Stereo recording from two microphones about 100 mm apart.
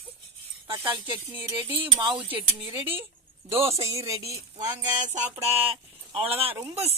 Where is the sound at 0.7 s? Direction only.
50° right (ahead or behind).